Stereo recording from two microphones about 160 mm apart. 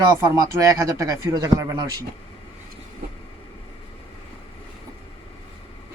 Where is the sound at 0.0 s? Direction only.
20° right (ahead or behind).